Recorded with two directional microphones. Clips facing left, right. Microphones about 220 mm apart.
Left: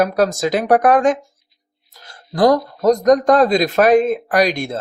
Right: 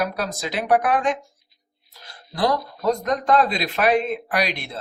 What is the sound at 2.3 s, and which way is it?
Speech, 45° left (ahead or behind).